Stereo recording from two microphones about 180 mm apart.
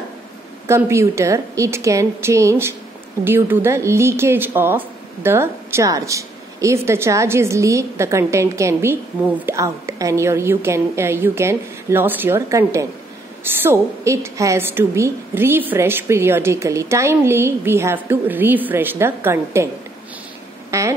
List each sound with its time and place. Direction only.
0.7 s a woman's voice: 15° right (ahead or behind)
20.7 s a woman's voice: 15° right (ahead or behind)